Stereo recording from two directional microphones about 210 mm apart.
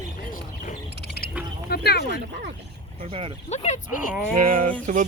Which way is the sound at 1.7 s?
50° left (ahead or behind).